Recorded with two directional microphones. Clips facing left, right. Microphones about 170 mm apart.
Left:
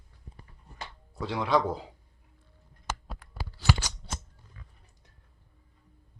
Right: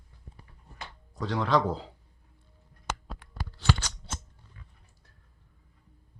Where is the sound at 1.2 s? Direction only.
10° left (ahead or behind).